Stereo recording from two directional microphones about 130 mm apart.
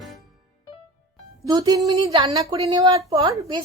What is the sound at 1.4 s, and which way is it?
Music, 30° right (ahead or behind).